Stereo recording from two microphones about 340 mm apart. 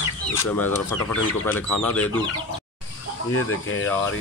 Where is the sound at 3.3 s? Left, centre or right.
Left.